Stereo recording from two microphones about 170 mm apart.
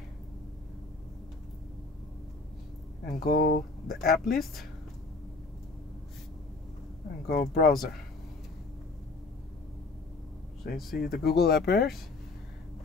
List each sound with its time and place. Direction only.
3.1 s speech: 60° left (ahead or behind)
7.2 s speech: 60° left (ahead or behind)
10.6 s speech: 65° left (ahead or behind)